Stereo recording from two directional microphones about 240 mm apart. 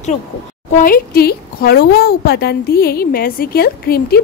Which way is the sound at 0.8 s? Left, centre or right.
Left.